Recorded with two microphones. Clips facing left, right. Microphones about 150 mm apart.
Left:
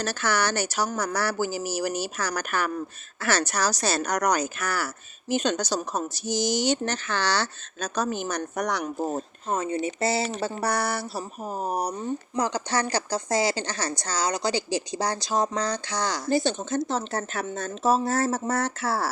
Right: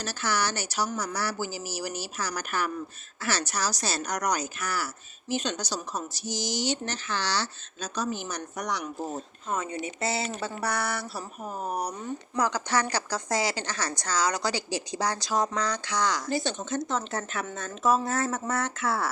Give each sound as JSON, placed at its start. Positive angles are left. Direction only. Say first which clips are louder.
{"t": 0.0, "sound": "speech", "louder": "left 4 dB", "side_deg": 60}